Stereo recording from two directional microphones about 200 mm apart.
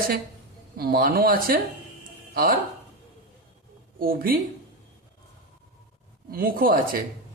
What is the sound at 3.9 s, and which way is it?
Speech, 45° right (ahead or behind).